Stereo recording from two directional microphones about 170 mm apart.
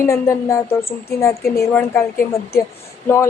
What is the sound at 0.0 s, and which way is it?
A woman's voice, 15° left (ahead or behind).